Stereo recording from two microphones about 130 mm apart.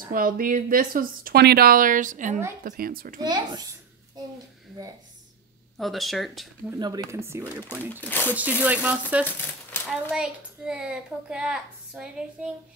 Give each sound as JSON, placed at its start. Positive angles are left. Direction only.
{"t": 0.0, "sound": "speech", "side_deg": -90}
{"t": 2.6, "sound": "speech", "side_deg": -90}
{"t": 3.2, "sound": "a child's voice", "side_deg": -30}
{"t": 5.8, "sound": "speech", "side_deg": 0}
{"t": 6.8, "sound": "speech", "side_deg": -30}
{"t": 7.9, "sound": "speech", "side_deg": 15}
{"t": 8.4, "sound": "a child's voice", "side_deg": -10}
{"t": 9.2, "sound": "speech", "side_deg": 15}
{"t": 9.8, "sound": "a child's voice", "side_deg": -5}